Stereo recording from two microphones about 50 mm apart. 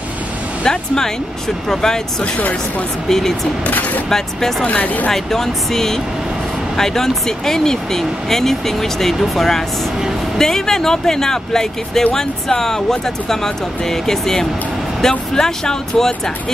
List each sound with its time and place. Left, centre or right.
0.7 s speech: centre
2.2 s speech: left
3.1 s speech: centre
3.6 s speech: left
4.1 s speech: centre
4.6 s speech: left
5.1 s speech: centre